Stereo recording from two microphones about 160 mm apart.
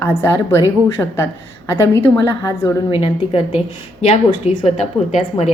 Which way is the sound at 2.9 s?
30° left (ahead or behind).